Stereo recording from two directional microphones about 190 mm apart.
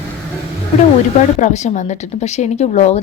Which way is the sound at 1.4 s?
40° left (ahead or behind).